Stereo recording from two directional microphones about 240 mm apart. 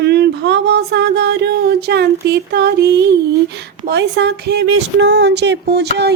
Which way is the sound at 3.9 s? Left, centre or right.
Right.